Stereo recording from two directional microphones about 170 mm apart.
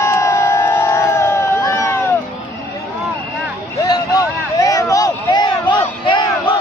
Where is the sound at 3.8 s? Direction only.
20° left (ahead or behind).